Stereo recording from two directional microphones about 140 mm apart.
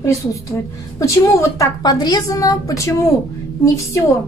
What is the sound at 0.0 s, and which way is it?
A woman's voice, 20° left (ahead or behind).